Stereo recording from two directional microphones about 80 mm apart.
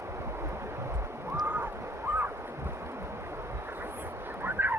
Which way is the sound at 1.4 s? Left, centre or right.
Right.